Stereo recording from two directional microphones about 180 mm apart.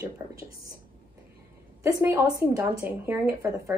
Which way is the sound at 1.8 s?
15° right (ahead or behind).